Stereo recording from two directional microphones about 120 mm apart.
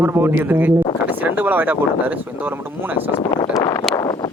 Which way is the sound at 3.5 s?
30° left (ahead or behind).